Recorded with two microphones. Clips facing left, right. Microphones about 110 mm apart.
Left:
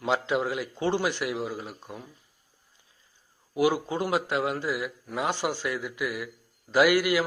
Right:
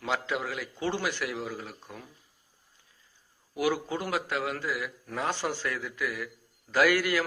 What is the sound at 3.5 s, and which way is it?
A man's voice, 20° left (ahead or behind).